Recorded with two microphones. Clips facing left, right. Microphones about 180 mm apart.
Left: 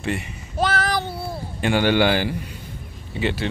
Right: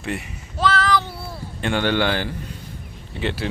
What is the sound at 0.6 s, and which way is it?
Child singing, 50° left (ahead or behind).